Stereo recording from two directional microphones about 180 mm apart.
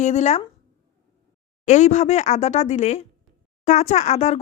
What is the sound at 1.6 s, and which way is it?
A woman's voice, 40° left (ahead or behind).